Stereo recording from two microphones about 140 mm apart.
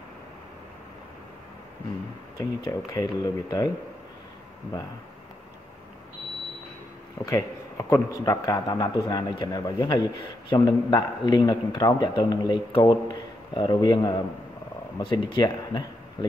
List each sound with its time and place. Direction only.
2.3 s a man's voice: 25° left (ahead or behind)
7.2 s a man's voice: 20° left (ahead or behind)